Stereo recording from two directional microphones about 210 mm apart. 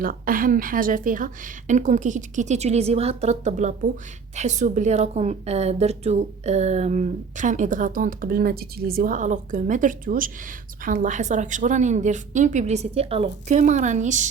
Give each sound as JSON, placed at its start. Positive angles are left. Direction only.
{"t": 0.0, "sound": "a woman's voice", "side_deg": -40}